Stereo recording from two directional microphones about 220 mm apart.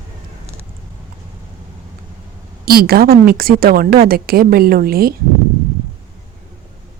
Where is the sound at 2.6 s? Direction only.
45° right (ahead or behind).